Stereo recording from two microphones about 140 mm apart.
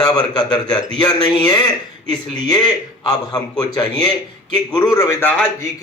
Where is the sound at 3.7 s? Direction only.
30° left (ahead or behind); by 5.6 s 15° left (ahead or behind).